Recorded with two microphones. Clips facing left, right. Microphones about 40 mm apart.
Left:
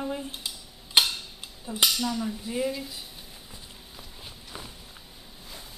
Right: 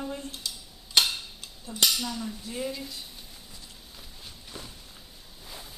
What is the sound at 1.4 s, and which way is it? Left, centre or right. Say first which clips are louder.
Cutlery: left 2 dB; centre.